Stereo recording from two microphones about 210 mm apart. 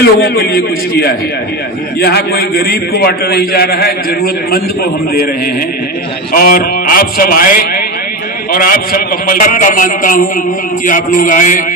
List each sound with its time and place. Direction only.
0.0 s a man's voice: 50° left (ahead or behind)
6.3 s a man's voice: 45° left (ahead or behind)